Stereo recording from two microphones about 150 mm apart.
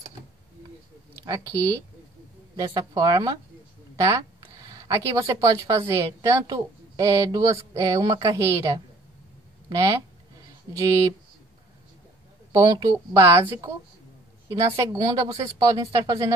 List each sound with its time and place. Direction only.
1.2 s a woman's voice: 20° right (ahead or behind)
12.5 s a woman's voice: 25° right (ahead or behind)